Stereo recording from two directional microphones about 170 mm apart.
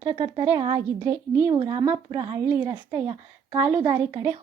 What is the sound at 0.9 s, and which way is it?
Speech, 20° right (ahead or behind).